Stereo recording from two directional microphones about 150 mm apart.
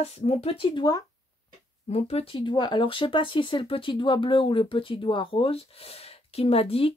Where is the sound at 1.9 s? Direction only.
45° left (ahead or behind).